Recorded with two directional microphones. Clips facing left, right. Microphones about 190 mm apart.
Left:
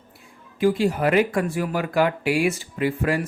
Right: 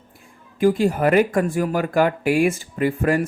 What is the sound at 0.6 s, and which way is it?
Speech, 50° right (ahead or behind).